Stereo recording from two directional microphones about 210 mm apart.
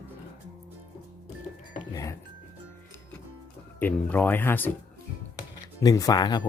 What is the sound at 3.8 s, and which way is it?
Speech, 10° left (ahead or behind).